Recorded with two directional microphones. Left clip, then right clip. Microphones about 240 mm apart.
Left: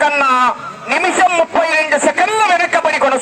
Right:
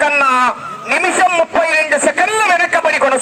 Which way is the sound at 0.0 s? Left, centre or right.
Centre.